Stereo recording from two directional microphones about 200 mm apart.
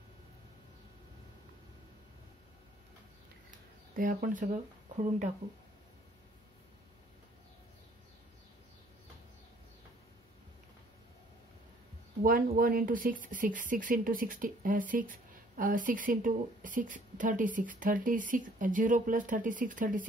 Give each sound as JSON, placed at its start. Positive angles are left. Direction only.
{"t": 3.9, "sound": "speech", "side_deg": -45}
{"t": 12.2, "sound": "speech", "side_deg": -45}